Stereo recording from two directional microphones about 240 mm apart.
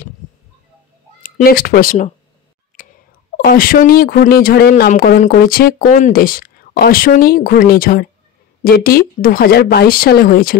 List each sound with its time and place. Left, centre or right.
1.2 s speech: left
3.3 s speech: left